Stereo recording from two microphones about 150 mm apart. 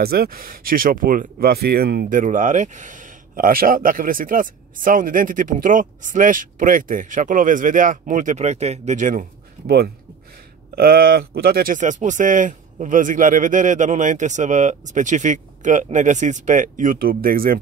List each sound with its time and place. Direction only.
0.0 s speech: 90° right; by 9.2 s 60° right (ahead or behind)
10.8 s speech: 85° right